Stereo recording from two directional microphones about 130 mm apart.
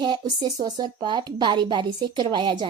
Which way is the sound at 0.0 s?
35° right (ahead or behind).